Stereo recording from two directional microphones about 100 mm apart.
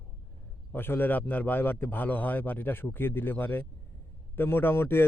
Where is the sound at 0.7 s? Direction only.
20° left (ahead or behind).